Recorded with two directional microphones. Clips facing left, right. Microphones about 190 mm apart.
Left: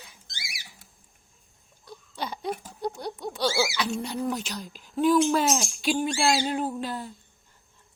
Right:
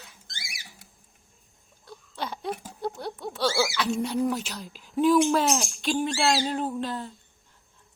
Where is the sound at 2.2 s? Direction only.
Centre (ahead or behind).